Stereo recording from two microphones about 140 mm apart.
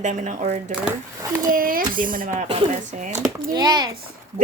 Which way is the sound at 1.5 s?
90° right.